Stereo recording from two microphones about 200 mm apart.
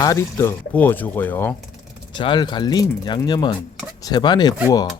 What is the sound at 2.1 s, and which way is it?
Speech, 25° left (ahead or behind).